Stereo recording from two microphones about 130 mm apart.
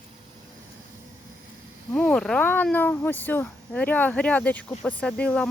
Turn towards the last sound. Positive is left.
turn(degrees=10)  # may be behind; listen again after turning